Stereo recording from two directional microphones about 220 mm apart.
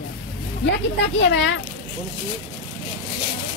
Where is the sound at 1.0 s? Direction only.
55° left (ahead or behind).